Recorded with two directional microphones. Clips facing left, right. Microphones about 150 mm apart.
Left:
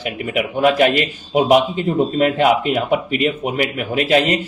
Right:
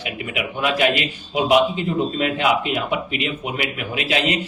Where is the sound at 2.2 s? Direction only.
40° left (ahead or behind).